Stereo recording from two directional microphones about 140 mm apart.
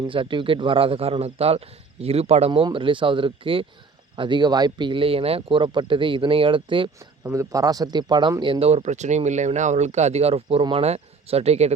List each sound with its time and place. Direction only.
0.1 s speech: 35° right (ahead or behind)
2.5 s speech: 35° right (ahead or behind)
7.3 s speech: 25° right (ahead or behind); by 11.7 s 50° right (ahead or behind)